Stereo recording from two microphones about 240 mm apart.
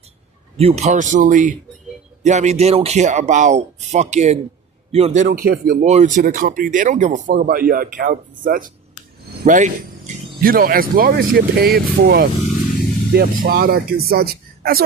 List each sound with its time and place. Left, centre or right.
0.5 s speech: right